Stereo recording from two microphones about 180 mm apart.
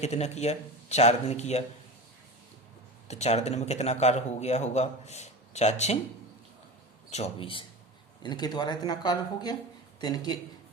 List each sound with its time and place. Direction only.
0.0 s a man's voice: 40° left (ahead or behind)
3.1 s a man's voice: 40° left (ahead or behind)
7.1 s a man's voice: 35° left (ahead or behind)